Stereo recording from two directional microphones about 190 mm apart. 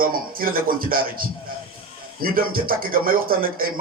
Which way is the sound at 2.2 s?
50° right (ahead or behind).